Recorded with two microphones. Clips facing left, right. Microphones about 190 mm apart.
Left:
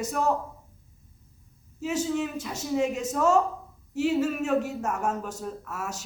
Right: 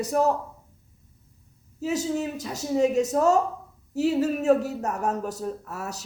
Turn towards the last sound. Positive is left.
turn(degrees=-35)  # may be behind; listen again after turning